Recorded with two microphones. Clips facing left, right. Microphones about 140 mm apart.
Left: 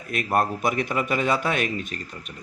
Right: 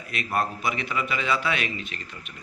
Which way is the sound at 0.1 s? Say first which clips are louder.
Left 4 dB; 50° left (ahead or behind).